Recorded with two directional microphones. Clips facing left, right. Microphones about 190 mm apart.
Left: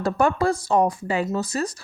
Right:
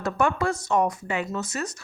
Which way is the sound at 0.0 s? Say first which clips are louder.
Left 4 dB; 35° left (ahead or behind).